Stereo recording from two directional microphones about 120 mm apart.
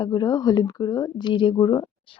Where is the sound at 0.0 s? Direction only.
35° left (ahead or behind).